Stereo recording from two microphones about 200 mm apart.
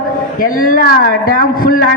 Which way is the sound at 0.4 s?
45° left (ahead or behind).